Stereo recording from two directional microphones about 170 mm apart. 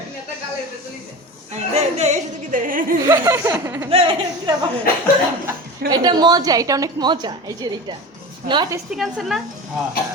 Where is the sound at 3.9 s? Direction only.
35° right (ahead or behind).